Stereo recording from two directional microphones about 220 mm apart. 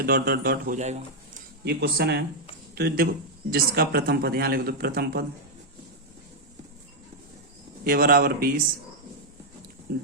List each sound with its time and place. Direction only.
0.0 s a man's voice: 45° right (ahead or behind)
1.6 s a man's voice: 45° right (ahead or behind)
7.9 s a man's voice: 40° right (ahead or behind)